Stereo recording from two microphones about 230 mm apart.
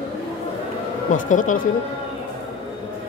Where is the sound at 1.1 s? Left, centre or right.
Left.